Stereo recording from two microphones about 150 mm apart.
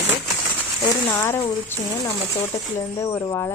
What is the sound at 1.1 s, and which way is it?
Speech, 15° left (ahead or behind).